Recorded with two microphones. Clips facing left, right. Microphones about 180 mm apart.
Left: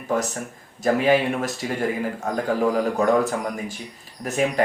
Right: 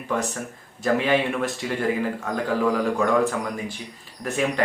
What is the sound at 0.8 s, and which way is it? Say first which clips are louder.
Speech: left 2 dB; 40° left (ahead or behind).